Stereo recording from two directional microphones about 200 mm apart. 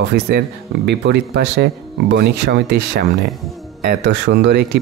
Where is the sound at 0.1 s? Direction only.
55° right (ahead or behind).